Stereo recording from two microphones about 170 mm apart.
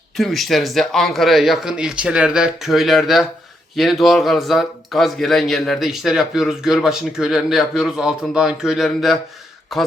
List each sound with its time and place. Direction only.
0.2 s speech: centre (ahead or behind)